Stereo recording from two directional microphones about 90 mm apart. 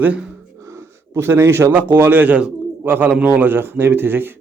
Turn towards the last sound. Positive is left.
turn(degrees=-25)  # may be behind; listen again after turning